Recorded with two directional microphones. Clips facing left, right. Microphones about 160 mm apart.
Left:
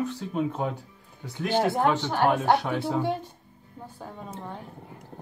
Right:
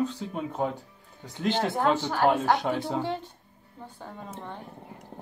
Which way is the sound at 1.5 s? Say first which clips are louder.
Left 2 dB; 10° left (ahead or behind).